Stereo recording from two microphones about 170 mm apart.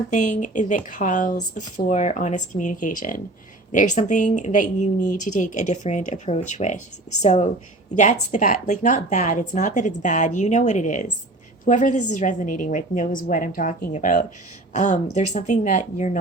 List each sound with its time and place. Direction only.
0.1 s speech: 45° left (ahead or behind)